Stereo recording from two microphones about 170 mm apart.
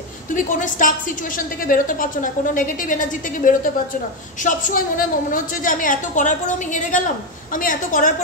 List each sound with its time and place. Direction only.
0.3 s a woman's voice: 50° left (ahead or behind)